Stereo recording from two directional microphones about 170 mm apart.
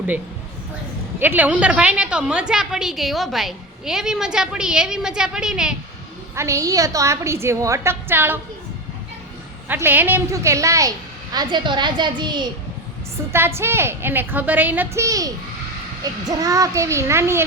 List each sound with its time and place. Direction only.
1.2 s a woman's voice: 10° right (ahead or behind)
6.3 s a woman's voice: 15° right (ahead or behind)
9.6 s a woman's voice: 10° right (ahead or behind)
13.3 s a woman's voice: 15° right (ahead or behind)